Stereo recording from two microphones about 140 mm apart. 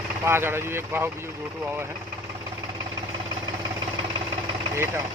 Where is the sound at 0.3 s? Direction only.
15° right (ahead or behind).